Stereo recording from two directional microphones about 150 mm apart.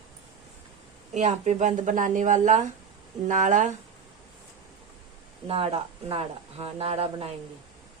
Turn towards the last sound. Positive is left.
turn(degrees=-40)  # may be behind; listen again after turning